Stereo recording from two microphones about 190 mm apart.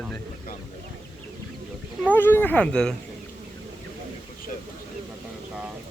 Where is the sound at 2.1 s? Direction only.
10° left (ahead or behind).